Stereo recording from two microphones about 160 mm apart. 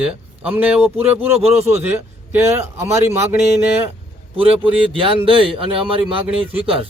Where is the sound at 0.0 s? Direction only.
5° right (ahead or behind).